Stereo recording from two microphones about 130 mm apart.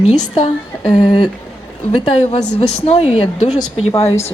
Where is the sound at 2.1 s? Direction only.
50° left (ahead or behind).